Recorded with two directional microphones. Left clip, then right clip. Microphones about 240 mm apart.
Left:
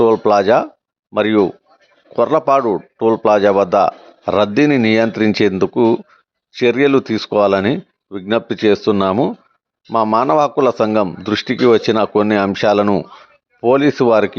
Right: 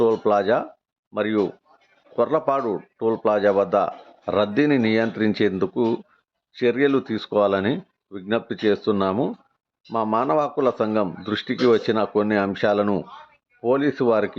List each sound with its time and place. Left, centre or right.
0.0 s a man's voice: left